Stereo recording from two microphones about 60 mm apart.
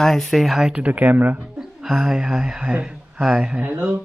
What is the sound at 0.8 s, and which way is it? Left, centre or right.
Speech, right.